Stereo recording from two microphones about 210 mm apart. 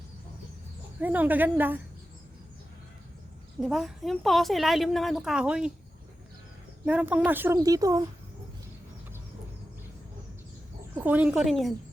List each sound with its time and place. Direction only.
1.0 s a woman's voice: 10° right (ahead or behind)
3.6 s a woman's voice: centre (ahead or behind)
6.8 s a woman's voice: 5° right (ahead or behind)
10.9 s a woman's voice: 5° right (ahead or behind)